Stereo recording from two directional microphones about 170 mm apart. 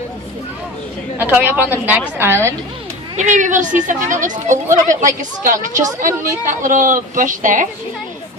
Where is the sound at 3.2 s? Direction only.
45° right (ahead or behind).